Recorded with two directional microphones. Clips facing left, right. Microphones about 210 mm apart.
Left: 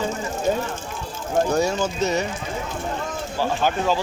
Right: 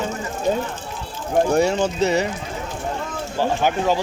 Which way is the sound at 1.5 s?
30° right (ahead or behind).